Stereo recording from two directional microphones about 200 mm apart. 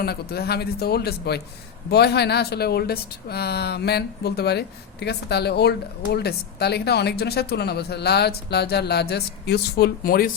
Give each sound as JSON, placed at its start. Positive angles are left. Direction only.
{"t": 0.0, "sound": "speech", "side_deg": 50}